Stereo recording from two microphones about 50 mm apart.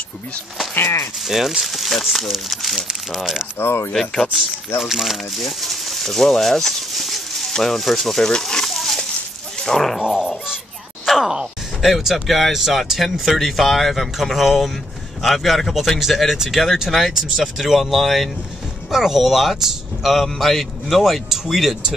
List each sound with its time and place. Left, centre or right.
1.2 s speech: centre
3.5 s speech: left
3.9 s speech: centre
8.3 s a sound: centre
9.6 s speech: centre
10.0 s dog: centre
11.1 s speech: centre